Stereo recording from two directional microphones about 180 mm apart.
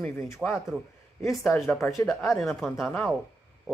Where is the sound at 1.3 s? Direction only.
Centre (ahead or behind).